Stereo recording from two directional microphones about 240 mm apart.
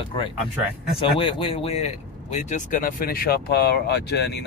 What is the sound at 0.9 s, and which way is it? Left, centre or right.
Speech, left.